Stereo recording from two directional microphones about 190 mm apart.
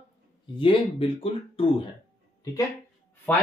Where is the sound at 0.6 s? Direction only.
25° left (ahead or behind).